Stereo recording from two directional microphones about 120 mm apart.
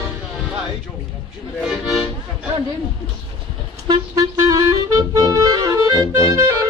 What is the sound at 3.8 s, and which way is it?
Clarinet, 30° right (ahead or behind).